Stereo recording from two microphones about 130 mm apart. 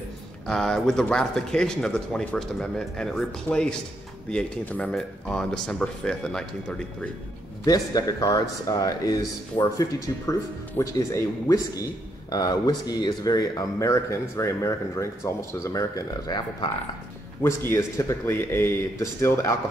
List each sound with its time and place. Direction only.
0.5 s speech: 5° left (ahead or behind)
7.6 s a man's voice: 30° left (ahead or behind)